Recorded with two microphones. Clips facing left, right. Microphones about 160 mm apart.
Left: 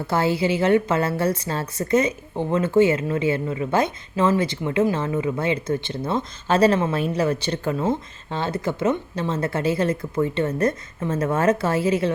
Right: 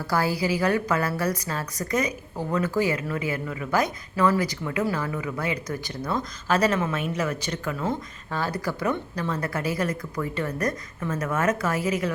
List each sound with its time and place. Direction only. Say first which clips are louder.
0.0 s a woman's voice: left 4 dB; 25° left (ahead or behind)